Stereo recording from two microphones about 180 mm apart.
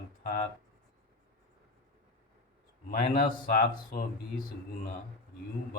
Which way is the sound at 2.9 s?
55° left (ahead or behind).